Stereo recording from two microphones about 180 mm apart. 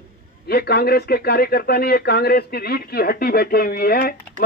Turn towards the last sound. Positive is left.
turn(degrees=55)  # may be behind; listen again after turning